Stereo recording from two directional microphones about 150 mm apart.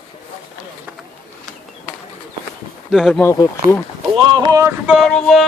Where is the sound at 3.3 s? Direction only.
25° left (ahead or behind).